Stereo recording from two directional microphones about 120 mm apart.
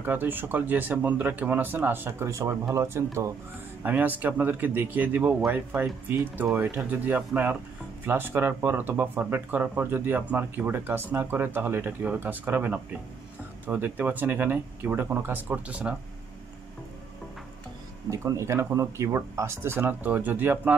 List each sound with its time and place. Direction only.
0.0 s speech: 15° right (ahead or behind)
18.1 s speech: 25° right (ahead or behind)